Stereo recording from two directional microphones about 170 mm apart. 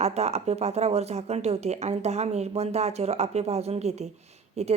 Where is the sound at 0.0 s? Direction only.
40° right (ahead or behind).